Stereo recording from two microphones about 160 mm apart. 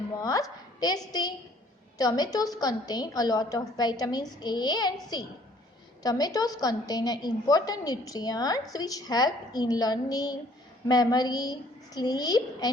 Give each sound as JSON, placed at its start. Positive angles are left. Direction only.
{"t": 0.2, "sound": "a woman's voice", "side_deg": 20}